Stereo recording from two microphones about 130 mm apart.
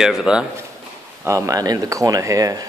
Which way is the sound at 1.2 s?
25° right (ahead or behind).